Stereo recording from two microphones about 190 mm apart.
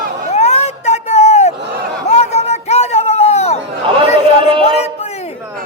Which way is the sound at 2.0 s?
35° left (ahead or behind).